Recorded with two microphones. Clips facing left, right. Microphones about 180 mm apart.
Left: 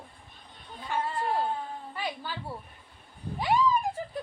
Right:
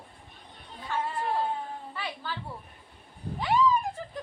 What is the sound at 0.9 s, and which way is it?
A woman's voice, 10° left (ahead or behind).